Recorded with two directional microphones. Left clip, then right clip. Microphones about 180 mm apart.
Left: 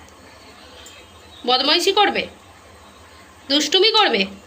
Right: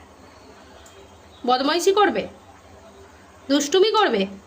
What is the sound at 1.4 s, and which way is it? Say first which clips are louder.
Speech: left 2 dB; 40° right (ahead or behind).